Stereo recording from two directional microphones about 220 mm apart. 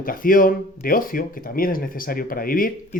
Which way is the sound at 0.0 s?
40° left (ahead or behind).